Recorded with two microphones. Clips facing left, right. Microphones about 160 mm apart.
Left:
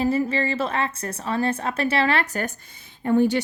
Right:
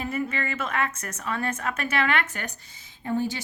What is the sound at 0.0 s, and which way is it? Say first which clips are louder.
A woman's voice: left 7 dB; 30° left (ahead or behind).